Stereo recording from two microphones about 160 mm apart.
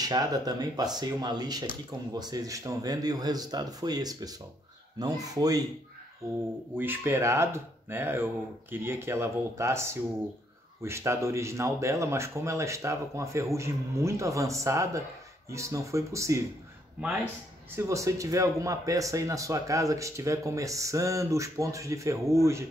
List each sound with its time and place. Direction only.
0.0 s speech: 25° right (ahead or behind)
6.7 s speech: 10° right (ahead or behind)
17.7 s speech: 20° right (ahead or behind)